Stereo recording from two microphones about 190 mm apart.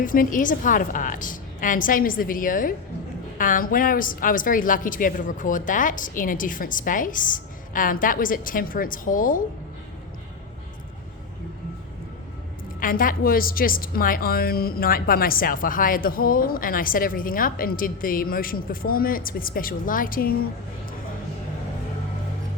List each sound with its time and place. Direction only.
0.0 s a woman's voice: 45° left (ahead or behind)
12.8 s a woman's voice: 45° left (ahead or behind)